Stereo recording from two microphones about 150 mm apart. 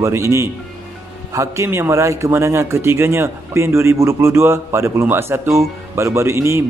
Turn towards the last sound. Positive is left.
turn(degrees=-15)  # may be behind; listen again after turning